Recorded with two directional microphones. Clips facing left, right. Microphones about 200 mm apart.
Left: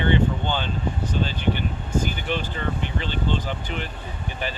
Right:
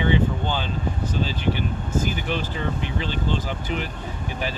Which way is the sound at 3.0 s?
5° right (ahead or behind).